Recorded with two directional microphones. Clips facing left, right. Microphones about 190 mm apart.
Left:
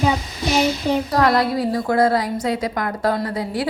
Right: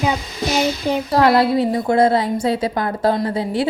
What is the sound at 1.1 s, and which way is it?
A woman's voice, 30° right (ahead or behind).